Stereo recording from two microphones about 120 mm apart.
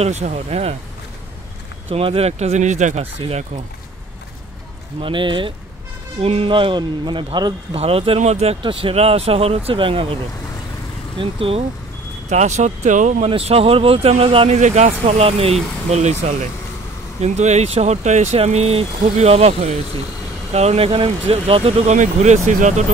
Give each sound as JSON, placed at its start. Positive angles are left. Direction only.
{"t": 0.0, "sound": "speech", "side_deg": -65}
{"t": 1.9, "sound": "speech", "side_deg": -55}
{"t": 3.0, "sound": "speech", "side_deg": -55}
{"t": 5.0, "sound": "speech", "side_deg": -45}
{"t": 6.2, "sound": "speech", "side_deg": -55}
{"t": 7.7, "sound": "speech", "side_deg": -55}
{"t": 11.1, "sound": "speech", "side_deg": -50}
{"t": 12.3, "sound": "speech", "side_deg": -80}
{"t": 13.3, "sound": "speech", "side_deg": -55}
{"t": 14.6, "sound": "speech", "side_deg": -75}
{"t": 17.2, "sound": "speech", "side_deg": -70}